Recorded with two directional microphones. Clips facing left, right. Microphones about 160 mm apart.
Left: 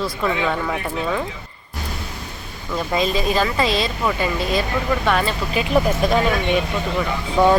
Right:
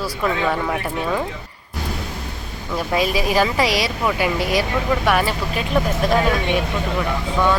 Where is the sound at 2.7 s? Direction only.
10° right (ahead or behind).